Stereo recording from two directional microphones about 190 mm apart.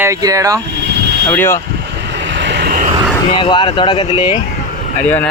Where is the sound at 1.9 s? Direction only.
65° right (ahead or behind).